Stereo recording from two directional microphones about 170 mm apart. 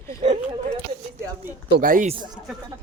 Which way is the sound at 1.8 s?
55° right (ahead or behind).